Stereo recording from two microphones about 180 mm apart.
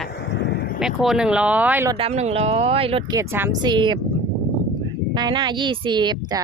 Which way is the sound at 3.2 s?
15° right (ahead or behind).